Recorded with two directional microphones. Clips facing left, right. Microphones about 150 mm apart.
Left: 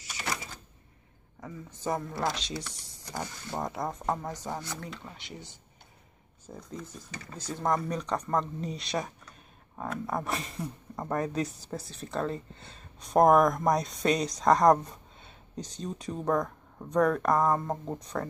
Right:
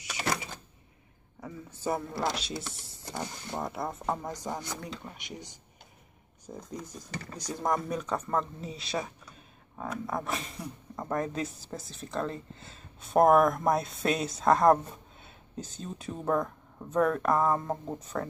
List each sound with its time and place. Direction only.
1.4 s speech: 10° right (ahead or behind)
2.5 s speech: 25° right (ahead or behind)
3.2 s speech: centre (ahead or behind)
6.5 s speech: 5° right (ahead or behind)